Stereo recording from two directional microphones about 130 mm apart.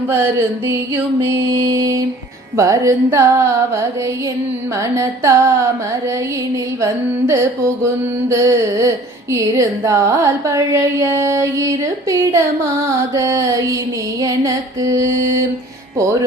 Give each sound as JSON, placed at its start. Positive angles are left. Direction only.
{"t": 0.1, "sound": "carnatic music", "side_deg": -20}
{"t": 8.3, "sound": "carnatic music", "side_deg": -25}